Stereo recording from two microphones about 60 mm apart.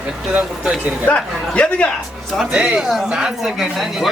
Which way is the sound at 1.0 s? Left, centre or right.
Left.